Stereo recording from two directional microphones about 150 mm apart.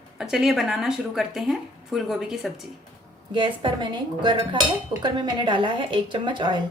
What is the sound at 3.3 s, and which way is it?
Speech, 35° right (ahead or behind).